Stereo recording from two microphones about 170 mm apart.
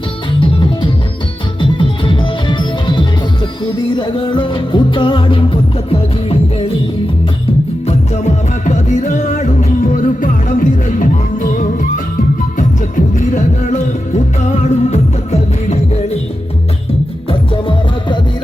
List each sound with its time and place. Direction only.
0.3 s music: 30° left (ahead or behind)
7.9 s music: 45° left (ahead or behind)
12.5 s music: 45° left (ahead or behind)
17.2 s music: 30° left (ahead or behind)